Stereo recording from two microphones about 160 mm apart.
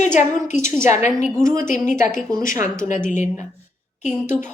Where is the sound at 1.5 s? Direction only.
55° left (ahead or behind).